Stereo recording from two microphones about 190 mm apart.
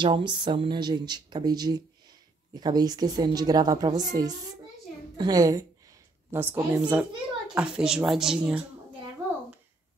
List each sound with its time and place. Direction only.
0.0 s a woman's voice: 25° right (ahead or behind); by 8.6 s 5° right (ahead or behind)